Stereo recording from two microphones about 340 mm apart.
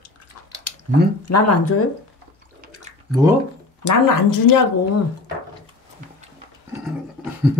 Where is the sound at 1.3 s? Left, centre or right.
Left.